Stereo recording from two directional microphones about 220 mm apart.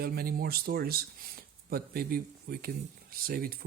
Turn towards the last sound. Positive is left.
turn(degrees=-40)  # may be behind; listen again after turning